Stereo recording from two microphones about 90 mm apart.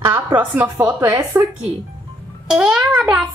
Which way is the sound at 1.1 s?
35° right (ahead or behind).